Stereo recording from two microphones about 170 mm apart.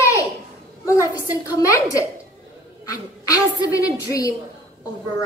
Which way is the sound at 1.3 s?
20° left (ahead or behind).